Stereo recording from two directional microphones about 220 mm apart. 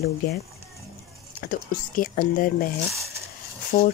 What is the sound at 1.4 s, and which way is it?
Speech, 40° left (ahead or behind).